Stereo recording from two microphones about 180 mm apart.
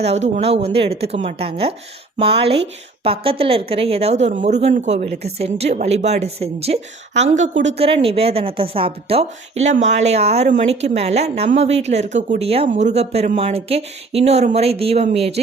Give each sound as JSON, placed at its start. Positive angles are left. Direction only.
{"t": 0.0, "sound": "a woman's voice", "side_deg": -40}